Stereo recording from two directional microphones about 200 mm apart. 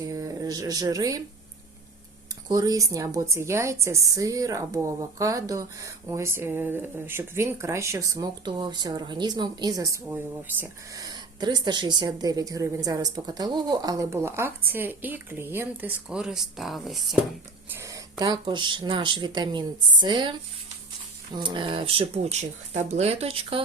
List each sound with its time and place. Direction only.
0.0 s a sound: 15° right (ahead or behind)
2.5 s a woman's voice: 20° right (ahead or behind); by 17.2 s centre (ahead or behind)
17.7 s speech: 15° right (ahead or behind)
21.3 s speech: 25° right (ahead or behind)